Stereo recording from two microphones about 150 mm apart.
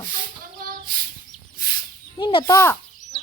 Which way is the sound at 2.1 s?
30° left (ahead or behind).